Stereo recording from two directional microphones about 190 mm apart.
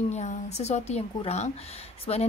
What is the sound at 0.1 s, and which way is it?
A woman's voice, 35° left (ahead or behind).